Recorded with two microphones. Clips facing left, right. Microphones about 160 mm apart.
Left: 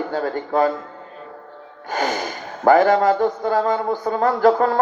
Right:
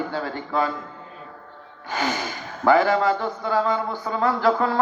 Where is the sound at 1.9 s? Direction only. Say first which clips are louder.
Left 3 dB; 45° left (ahead or behind).